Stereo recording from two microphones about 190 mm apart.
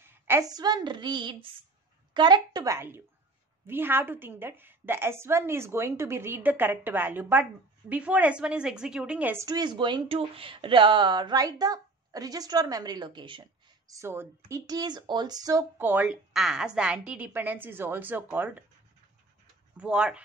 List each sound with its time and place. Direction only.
0.0 s a woman's voice: 10° right (ahead or behind)
19.8 s speech: 5° right (ahead or behind)